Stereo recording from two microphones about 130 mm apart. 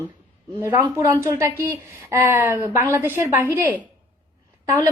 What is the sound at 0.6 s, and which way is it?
Speech, 20° right (ahead or behind).